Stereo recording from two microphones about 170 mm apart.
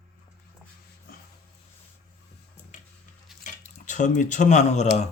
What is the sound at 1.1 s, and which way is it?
Dog, 60° left (ahead or behind).